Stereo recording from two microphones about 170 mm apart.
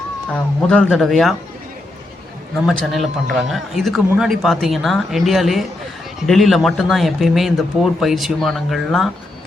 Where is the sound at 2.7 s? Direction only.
Centre (ahead or behind).